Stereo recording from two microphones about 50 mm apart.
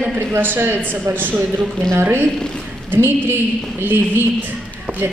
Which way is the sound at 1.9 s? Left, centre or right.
Right.